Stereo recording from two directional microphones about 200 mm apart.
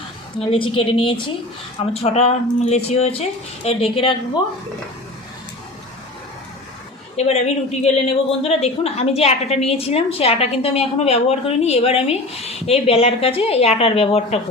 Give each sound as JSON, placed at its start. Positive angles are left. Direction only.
{"t": 0.3, "sound": "a woman's voice", "side_deg": 30}
{"t": 7.2, "sound": "a woman's voice", "side_deg": 35}